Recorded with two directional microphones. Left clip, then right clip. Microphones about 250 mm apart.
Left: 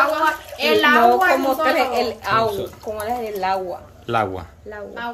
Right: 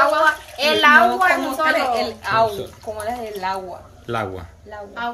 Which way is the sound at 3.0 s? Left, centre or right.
Left.